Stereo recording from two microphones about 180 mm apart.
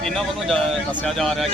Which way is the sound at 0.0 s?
Centre (ahead or behind).